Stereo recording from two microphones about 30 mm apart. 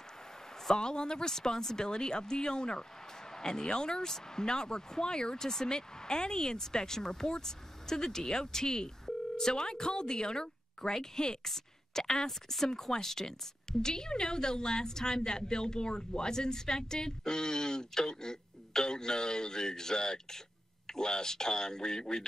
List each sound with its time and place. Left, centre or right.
0.7 s a woman's voice: left
1.3 s a woman's voice: centre
11.4 s a sound: centre
12.0 s a woman's voice: left
12.3 s a woman's voice: centre; by 22.2 s left